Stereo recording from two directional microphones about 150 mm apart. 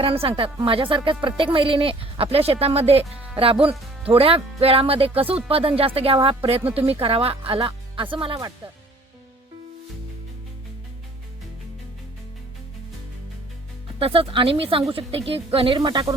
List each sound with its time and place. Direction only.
0.0 s speech: 40° right (ahead or behind)
14.0 s speech: 35° right (ahead or behind)